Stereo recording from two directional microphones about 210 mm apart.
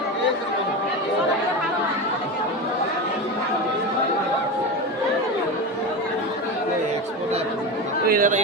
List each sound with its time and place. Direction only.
8.0 s chatter: 40° right (ahead or behind)